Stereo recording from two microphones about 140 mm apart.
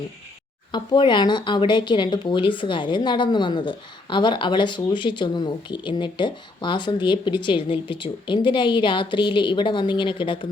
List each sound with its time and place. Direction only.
0.7 s speech: 35° left (ahead or behind)